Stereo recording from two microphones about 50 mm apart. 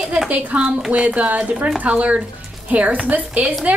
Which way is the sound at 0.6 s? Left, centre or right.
Centre.